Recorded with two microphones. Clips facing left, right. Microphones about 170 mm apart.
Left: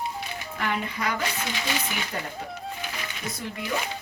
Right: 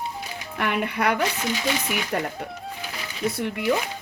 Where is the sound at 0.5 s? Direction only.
65° right (ahead or behind).